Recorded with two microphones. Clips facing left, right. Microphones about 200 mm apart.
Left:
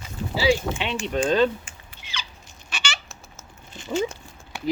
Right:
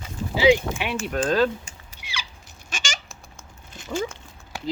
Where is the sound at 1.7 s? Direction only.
40° right (ahead or behind).